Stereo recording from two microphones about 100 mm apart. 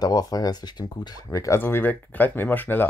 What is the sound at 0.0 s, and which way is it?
Speech, 40° left (ahead or behind).